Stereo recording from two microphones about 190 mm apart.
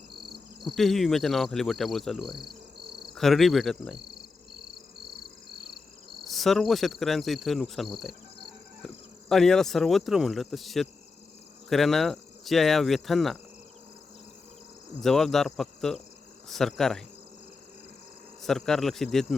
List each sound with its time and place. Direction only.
0.6 s cricket: centre (ahead or behind)
2.7 s cricket: 25° right (ahead or behind)
3.2 s cricket: centre (ahead or behind)
6.2 s cricket: centre (ahead or behind)
8.8 s insect: 5° left (ahead or behind)
11.7 s cricket: centre (ahead or behind)
15.0 s cricket: centre (ahead or behind)
18.4 s cricket: centre (ahead or behind)